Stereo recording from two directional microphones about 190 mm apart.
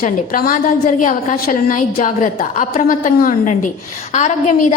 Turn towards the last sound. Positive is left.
turn(degrees=40)  # may be behind; listen again after turning